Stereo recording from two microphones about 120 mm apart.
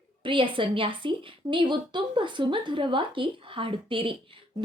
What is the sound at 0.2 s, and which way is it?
A woman's voice, 45° right (ahead or behind).